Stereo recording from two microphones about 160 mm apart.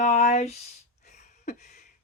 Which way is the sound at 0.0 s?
45° left (ahead or behind).